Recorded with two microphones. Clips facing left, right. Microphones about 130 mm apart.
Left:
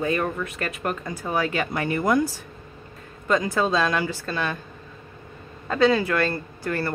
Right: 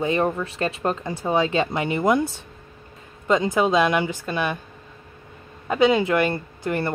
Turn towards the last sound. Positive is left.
turn(degrees=-20)  # may be behind; listen again after turning